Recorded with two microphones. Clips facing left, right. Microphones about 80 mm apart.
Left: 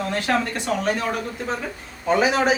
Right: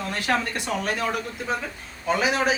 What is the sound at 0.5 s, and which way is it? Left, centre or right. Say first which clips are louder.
Speech: left 4 dB; centre.